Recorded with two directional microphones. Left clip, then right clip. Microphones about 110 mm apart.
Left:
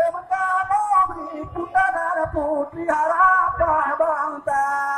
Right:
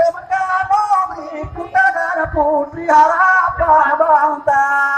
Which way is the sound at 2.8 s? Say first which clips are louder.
Right 6 dB; 10° right (ahead or behind).